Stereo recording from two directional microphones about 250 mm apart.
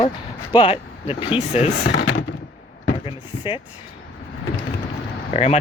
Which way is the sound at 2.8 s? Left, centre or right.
Left.